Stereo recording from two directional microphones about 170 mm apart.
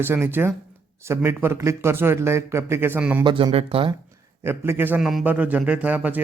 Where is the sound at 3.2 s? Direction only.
30° right (ahead or behind).